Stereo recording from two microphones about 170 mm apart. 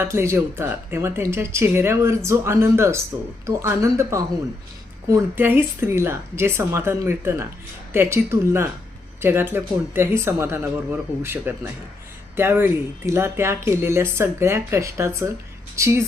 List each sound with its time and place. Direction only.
0.0 s a woman's voice: 15° right (ahead or behind)